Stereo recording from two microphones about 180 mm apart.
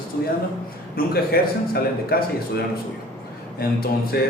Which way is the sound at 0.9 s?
60° left (ahead or behind).